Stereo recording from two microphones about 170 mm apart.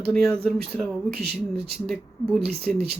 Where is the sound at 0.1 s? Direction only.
5° left (ahead or behind).